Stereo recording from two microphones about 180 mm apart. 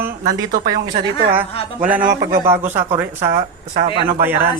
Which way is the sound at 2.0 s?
55° right (ahead or behind).